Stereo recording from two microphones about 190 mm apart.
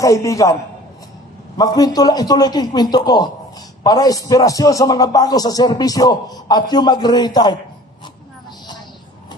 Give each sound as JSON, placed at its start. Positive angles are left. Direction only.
{"t": 0.0, "sound": "a man's voice", "side_deg": 15}
{"t": 1.6, "sound": "a man's voice", "side_deg": 20}